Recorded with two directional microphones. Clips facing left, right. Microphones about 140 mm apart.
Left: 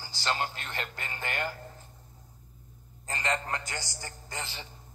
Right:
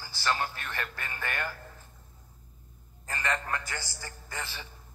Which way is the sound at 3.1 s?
25° left (ahead or behind).